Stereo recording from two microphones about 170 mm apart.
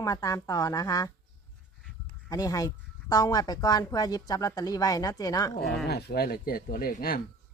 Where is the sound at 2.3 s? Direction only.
20° left (ahead or behind).